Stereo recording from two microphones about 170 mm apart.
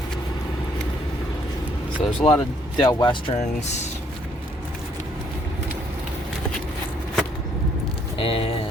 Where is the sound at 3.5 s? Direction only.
45° left (ahead or behind).